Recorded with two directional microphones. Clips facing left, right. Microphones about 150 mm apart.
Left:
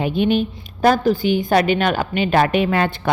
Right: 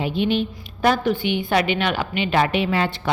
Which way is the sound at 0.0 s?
50° left (ahead or behind).